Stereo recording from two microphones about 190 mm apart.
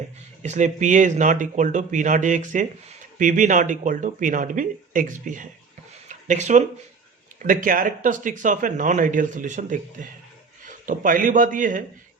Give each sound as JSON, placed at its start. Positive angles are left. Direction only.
{"t": 0.4, "sound": "speech", "side_deg": -40}
{"t": 6.1, "sound": "a sound", "side_deg": -40}
{"t": 7.3, "sound": "speech", "side_deg": -45}